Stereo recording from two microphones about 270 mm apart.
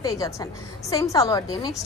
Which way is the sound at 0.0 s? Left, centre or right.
Centre.